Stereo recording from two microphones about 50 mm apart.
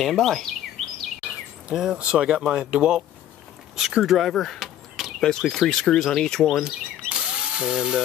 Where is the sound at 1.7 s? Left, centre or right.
Centre.